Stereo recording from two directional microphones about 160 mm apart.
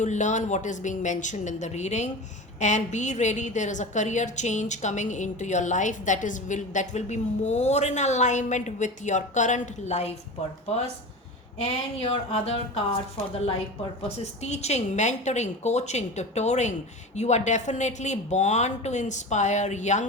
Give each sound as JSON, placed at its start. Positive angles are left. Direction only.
{"t": 0.0, "sound": "a woman's voice", "side_deg": 50}
{"t": 11.5, "sound": "a sound", "side_deg": 40}
{"t": 14.4, "sound": "a woman's voice", "side_deg": 45}